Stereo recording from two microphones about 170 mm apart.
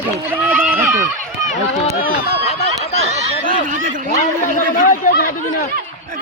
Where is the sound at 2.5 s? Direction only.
35° left (ahead or behind).